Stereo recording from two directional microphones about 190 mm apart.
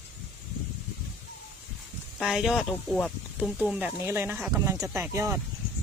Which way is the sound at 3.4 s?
5° right (ahead or behind).